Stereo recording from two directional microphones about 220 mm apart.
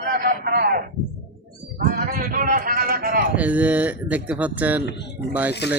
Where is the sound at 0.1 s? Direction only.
45° right (ahead or behind).